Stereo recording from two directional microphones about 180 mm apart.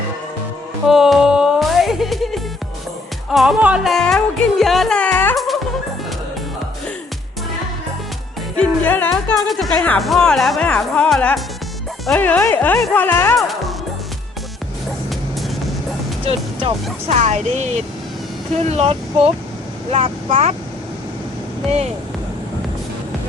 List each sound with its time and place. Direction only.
0.9 s music: centre (ahead or behind)
8.5 s music: 10° left (ahead or behind)
9.5 s speech: centre (ahead or behind)
16.2 s speech: 30° right (ahead or behind)